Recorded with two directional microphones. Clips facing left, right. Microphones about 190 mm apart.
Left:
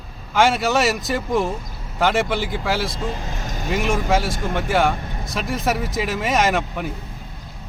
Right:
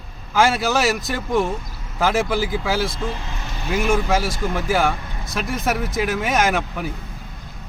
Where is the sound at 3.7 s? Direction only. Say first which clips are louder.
Right 1 dB; centre (ahead or behind).